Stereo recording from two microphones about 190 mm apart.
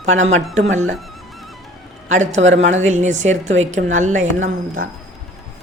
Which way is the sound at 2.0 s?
40° right (ahead or behind).